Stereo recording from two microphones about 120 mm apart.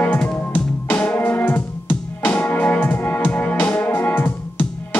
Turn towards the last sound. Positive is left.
turn(degrees=15)  # may be behind; listen again after turning